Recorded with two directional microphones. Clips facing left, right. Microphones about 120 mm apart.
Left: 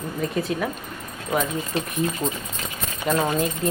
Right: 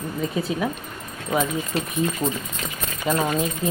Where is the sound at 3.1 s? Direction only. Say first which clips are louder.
Left 1 dB; centre (ahead or behind).